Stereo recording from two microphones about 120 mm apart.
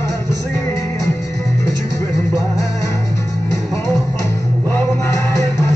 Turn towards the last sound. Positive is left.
turn(degrees=25)  # may be behind; listen again after turning